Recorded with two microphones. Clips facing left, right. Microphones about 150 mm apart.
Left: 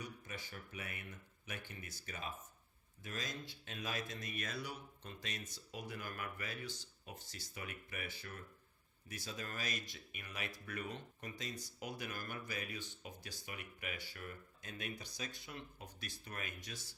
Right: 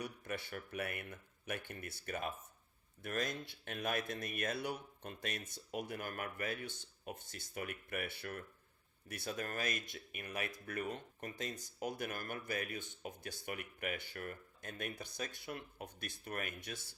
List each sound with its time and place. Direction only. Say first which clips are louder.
0.0 s speech: right 6 dB; 60° right (ahead or behind)